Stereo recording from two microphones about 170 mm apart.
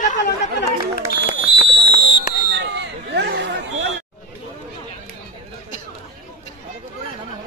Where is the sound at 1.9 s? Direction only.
75° right (ahead or behind).